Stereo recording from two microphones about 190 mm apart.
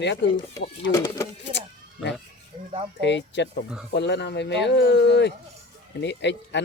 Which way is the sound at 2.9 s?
65° left (ahead or behind).